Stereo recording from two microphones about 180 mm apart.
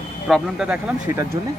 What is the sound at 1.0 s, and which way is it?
Speech, 15° right (ahead or behind).